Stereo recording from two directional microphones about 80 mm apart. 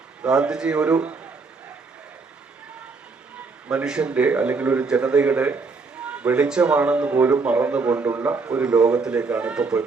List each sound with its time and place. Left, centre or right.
0.2 s a man's voice: centre
3.7 s a man's voice: centre
8.5 s a man's voice: centre